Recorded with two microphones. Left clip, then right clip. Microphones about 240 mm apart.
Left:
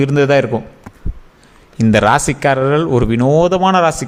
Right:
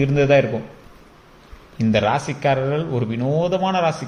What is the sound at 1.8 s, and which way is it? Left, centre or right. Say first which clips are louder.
Speech: left 7 dB; left.